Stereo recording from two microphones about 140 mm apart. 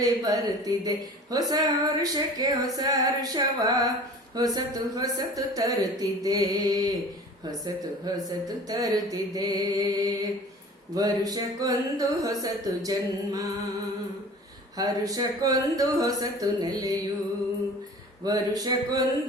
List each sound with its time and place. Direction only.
0.0 s speech: 25° right (ahead or behind)
14.8 s speech: 25° right (ahead or behind)
18.3 s speech: 25° right (ahead or behind)